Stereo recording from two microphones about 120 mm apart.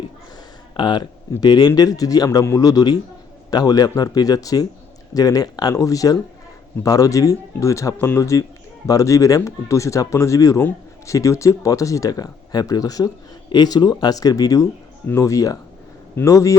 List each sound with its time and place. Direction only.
0.8 s speech: 40° left (ahead or behind)